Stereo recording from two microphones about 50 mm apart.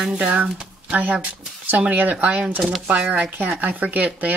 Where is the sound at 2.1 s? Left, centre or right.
Right.